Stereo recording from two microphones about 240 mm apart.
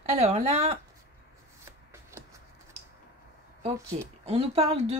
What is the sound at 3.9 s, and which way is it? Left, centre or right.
Speech, right.